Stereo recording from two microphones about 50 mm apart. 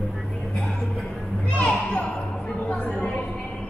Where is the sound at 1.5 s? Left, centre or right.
Left.